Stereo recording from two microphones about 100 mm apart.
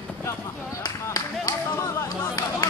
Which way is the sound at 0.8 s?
40° left (ahead or behind).